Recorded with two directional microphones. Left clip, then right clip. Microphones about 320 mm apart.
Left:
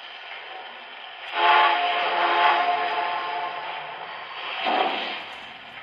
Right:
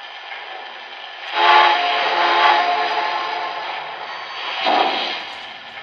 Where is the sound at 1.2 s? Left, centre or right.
Right.